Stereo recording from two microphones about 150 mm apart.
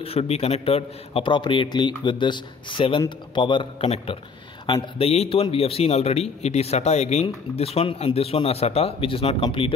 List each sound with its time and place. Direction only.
0.0 s a man's voice: 40° left (ahead or behind)